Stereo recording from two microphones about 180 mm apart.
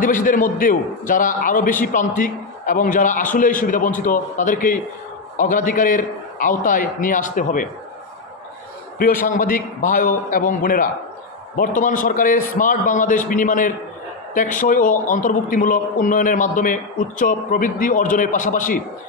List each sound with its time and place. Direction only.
0.0 s a man's voice: 50° left (ahead or behind)
8.9 s a man's voice: 55° left (ahead or behind)